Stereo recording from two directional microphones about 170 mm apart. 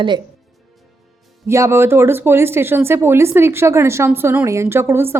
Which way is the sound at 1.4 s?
15° right (ahead or behind).